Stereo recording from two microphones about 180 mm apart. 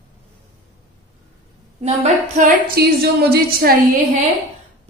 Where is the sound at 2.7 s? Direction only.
60° right (ahead or behind).